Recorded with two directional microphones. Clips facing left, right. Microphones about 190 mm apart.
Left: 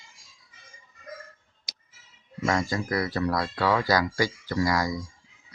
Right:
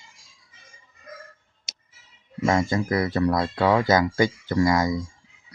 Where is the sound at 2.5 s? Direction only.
25° right (ahead or behind).